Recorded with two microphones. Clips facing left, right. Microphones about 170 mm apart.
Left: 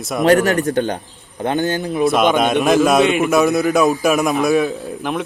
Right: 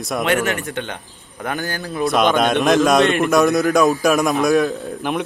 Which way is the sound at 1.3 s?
25° left (ahead or behind).